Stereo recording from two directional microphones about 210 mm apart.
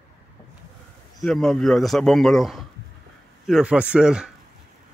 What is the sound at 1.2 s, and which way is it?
A man's voice, centre (ahead or behind).